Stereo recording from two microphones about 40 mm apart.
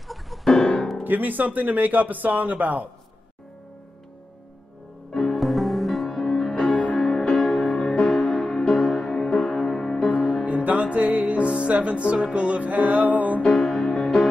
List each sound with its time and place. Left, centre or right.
0.1 s music: centre
0.5 s music: centre
1.0 s speech: right
5.1 s music: centre
6.5 s music: left
7.0 s music: centre
8.7 s music: left
9.1 s music: centre
10.1 s music: left
10.4 s music: right
13.6 s music: centre